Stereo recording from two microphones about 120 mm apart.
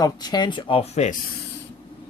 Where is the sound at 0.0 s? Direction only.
35° left (ahead or behind).